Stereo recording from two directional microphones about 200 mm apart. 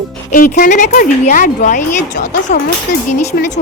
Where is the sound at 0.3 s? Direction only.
45° left (ahead or behind).